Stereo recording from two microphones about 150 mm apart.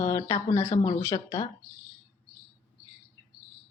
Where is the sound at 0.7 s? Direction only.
60° left (ahead or behind).